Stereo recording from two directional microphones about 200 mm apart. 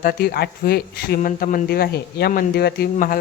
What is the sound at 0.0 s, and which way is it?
A man's voice, 50° left (ahead or behind).